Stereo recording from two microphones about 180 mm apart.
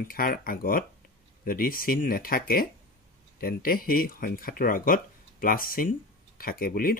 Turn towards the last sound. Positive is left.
turn(degrees=50)  # may be behind; listen again after turning